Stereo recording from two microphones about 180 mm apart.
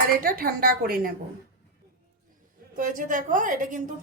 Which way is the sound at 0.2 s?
55° right (ahead or behind).